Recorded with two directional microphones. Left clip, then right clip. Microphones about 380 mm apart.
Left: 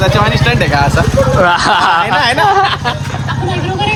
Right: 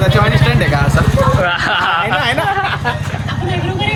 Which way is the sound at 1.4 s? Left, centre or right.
Centre.